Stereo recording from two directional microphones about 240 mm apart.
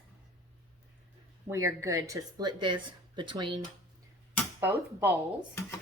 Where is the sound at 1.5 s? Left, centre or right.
Centre.